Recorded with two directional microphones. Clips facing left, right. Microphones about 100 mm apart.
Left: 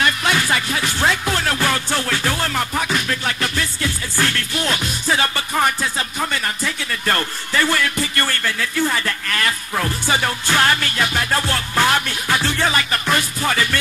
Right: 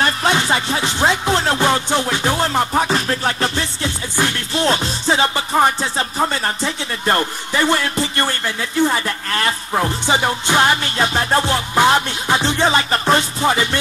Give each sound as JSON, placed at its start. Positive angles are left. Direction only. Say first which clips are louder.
{"t": 0.0, "sound": "music", "louder": "right 2 dB", "side_deg": -30}